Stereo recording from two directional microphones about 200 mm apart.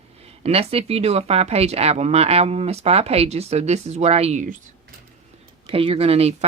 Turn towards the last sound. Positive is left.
turn(degrees=-30)  # may be behind; listen again after turning